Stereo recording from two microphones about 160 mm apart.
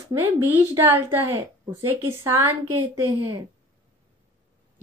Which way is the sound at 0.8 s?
15° right (ahead or behind).